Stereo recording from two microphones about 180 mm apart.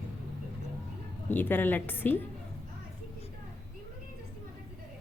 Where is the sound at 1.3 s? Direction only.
10° left (ahead or behind).